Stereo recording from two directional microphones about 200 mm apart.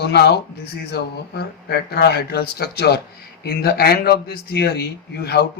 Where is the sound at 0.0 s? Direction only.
55° left (ahead or behind).